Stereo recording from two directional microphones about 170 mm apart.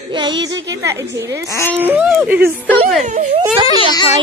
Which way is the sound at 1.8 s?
10° right (ahead or behind).